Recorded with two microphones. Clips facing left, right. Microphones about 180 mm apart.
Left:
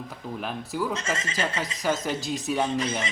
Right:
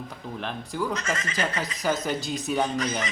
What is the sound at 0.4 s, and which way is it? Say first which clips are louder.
Speech: even; 5° left (ahead or behind).